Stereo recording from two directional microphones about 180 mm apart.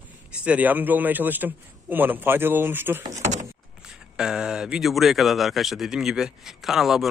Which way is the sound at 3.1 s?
40° right (ahead or behind).